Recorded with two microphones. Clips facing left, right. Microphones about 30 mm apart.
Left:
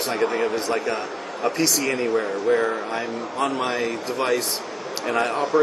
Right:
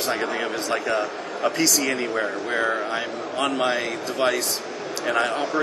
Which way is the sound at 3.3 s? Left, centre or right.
Right.